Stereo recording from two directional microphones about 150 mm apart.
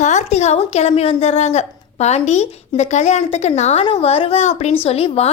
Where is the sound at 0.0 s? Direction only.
50° left (ahead or behind).